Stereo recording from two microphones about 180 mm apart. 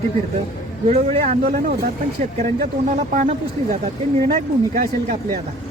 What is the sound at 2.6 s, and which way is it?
Speech, 45° right (ahead or behind).